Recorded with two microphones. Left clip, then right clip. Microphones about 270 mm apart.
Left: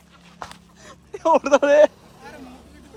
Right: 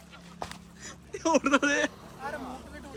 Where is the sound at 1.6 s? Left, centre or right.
Centre.